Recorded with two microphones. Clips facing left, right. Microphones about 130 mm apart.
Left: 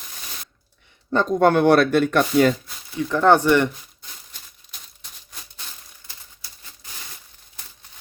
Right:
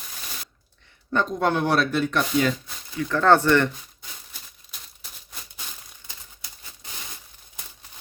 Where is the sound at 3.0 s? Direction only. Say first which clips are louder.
Left 2 dB; 15° left (ahead or behind).